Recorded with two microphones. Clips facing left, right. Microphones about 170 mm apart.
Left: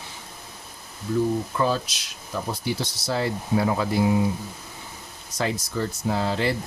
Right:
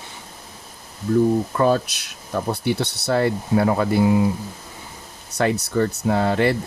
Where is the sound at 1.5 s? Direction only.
50° right (ahead or behind).